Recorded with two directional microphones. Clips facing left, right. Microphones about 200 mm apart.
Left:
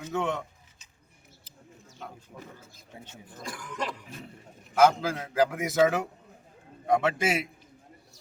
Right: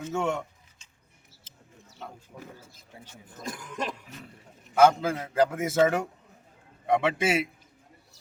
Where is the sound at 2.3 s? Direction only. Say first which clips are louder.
Right 1 dB; 5° right (ahead or behind).